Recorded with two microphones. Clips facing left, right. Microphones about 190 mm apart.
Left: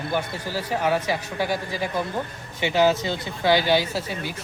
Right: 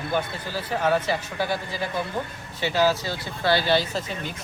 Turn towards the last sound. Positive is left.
turn(degrees=10)  # may be behind; listen again after turning